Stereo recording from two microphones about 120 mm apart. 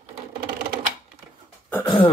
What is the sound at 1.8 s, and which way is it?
Throat clearing, 40° left (ahead or behind).